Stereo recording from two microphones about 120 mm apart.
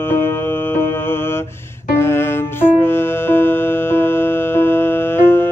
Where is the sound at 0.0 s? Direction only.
20° left (ahead or behind).